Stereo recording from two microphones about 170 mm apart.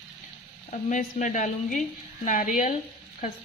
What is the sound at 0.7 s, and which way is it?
Speech, 45° left (ahead or behind).